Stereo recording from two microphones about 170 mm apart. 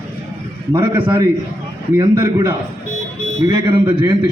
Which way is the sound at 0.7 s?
25° right (ahead or behind).